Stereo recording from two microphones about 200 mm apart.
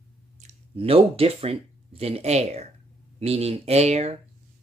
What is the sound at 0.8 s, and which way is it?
Speech, 30° right (ahead or behind).